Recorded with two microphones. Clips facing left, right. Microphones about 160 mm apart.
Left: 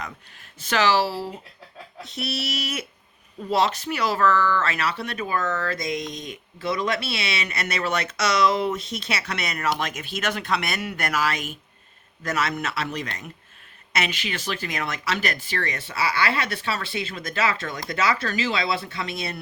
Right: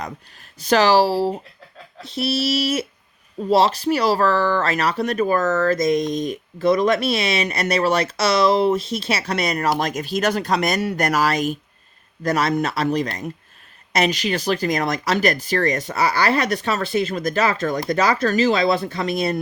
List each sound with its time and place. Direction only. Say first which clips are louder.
0.6 s speech: right 6 dB; 40° right (ahead or behind)